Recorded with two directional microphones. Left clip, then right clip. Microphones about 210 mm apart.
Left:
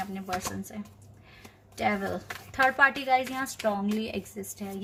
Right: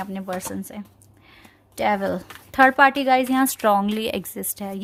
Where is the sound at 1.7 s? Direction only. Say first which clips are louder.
Right 7 dB; 50° right (ahead or behind).